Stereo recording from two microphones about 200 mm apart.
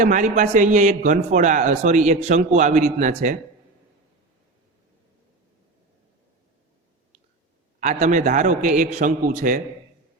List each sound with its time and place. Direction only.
0.0 s a man's voice: 40° right (ahead or behind)
7.8 s a man's voice: 35° right (ahead or behind)